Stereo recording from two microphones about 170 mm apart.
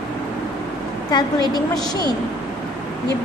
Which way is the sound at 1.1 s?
25° left (ahead or behind).